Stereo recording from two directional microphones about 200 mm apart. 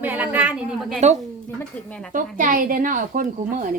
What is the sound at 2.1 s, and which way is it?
Speech, 40° right (ahead or behind).